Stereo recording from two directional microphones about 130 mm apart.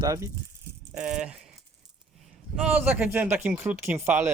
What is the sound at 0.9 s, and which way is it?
Speech, 5° right (ahead or behind).